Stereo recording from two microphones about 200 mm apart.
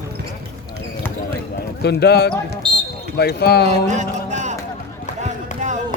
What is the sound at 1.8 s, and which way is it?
Speech, 55° left (ahead or behind).